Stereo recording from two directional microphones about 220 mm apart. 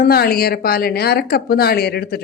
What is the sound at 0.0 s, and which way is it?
A woman's voice, 45° left (ahead or behind).